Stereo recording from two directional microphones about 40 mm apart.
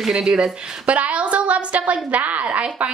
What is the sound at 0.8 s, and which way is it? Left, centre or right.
A woman's voice, right.